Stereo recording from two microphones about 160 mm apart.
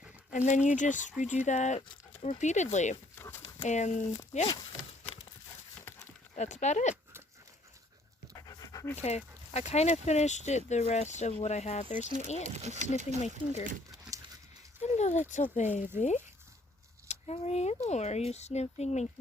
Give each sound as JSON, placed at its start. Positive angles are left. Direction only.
{"t": 0.3, "sound": "speech", "side_deg": 50}
{"t": 3.2, "sound": "a sound", "side_deg": 15}
{"t": 3.6, "sound": "speech", "side_deg": 45}
{"t": 6.3, "sound": "speech", "side_deg": 50}
{"t": 8.4, "sound": "pant", "side_deg": 20}
{"t": 9.0, "sound": "speech", "side_deg": 45}
{"t": 12.5, "sound": "speech", "side_deg": -45}
{"t": 14.8, "sound": "a sound", "side_deg": 45}
{"t": 15.5, "sound": "speech", "side_deg": 50}